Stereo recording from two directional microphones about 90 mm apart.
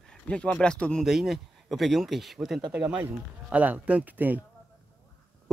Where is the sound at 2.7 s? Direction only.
15° right (ahead or behind).